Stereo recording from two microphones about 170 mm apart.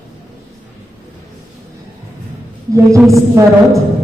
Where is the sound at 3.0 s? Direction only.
20° right (ahead or behind).